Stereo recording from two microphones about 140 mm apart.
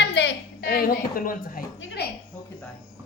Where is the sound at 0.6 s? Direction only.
90° left.